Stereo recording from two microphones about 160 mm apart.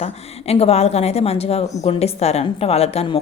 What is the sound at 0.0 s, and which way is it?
A woman's voice, 40° left (ahead or behind).